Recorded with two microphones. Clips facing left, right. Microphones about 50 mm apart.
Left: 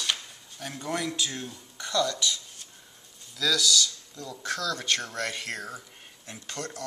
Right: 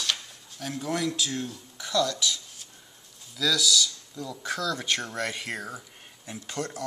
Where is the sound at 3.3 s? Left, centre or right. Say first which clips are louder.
Right 1 dB; centre.